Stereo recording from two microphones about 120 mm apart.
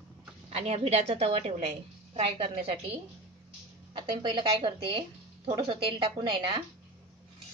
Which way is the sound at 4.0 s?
40° right (ahead or behind).